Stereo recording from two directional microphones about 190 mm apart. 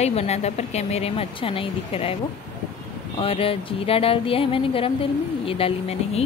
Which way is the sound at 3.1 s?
30° left (ahead or behind).